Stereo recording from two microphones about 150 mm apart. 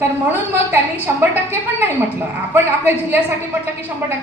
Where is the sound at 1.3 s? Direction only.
15° right (ahead or behind).